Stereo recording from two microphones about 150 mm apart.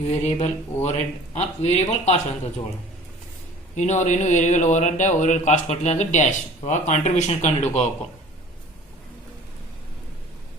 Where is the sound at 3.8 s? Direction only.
50° left (ahead or behind).